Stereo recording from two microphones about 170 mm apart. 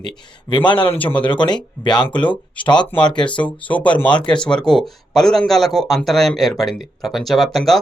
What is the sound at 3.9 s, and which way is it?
Speech, 30° left (ahead or behind).